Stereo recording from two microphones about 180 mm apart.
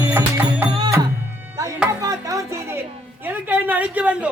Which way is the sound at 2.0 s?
15° right (ahead or behind).